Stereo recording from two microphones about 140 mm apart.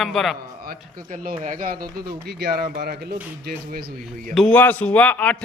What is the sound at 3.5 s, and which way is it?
Speech, 85° right.